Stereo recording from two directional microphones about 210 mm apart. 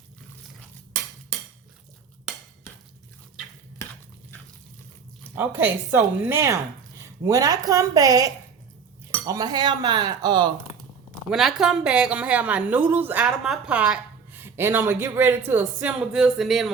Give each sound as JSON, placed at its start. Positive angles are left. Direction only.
{"t": 5.3, "sound": "a woman's voice", "side_deg": -10}
{"t": 11.3, "sound": "a woman's voice", "side_deg": 0}